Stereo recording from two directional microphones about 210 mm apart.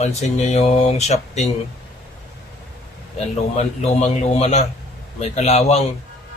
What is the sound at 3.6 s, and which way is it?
Speech, 30° left (ahead or behind).